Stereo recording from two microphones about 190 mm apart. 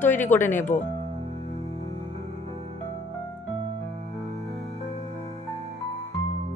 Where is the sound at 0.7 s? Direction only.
40° left (ahead or behind).